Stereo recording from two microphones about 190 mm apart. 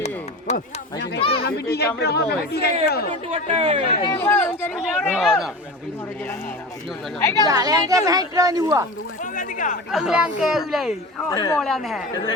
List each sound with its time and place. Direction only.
0.0 s chop: 35° left (ahead or behind)
0.9 s speech: 60° left (ahead or behind)
1.2 s children playing: 30° left (ahead or behind)
1.5 s speech: 55° left (ahead or behind)
3.2 s speech: 30° right (ahead or behind)
4.1 s speech: 10° left (ahead or behind)
7.2 s speech: 15° left (ahead or behind)
7.4 s speech: 20° right (ahead or behind)
9.2 s speech: 45° left (ahead or behind)
9.9 s speech: 5° right (ahead or behind)
11.3 s speech: 20° left (ahead or behind)
11.6 s speech: centre (ahead or behind)